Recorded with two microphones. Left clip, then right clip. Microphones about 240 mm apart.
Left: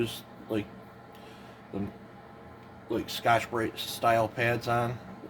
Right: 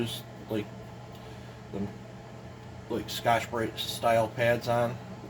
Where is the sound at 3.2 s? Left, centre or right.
Left.